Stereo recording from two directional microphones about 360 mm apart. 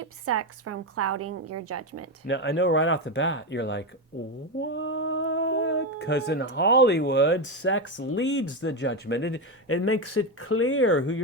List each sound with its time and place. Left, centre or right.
0.0 s a woman's voice: right
2.2 s speech: left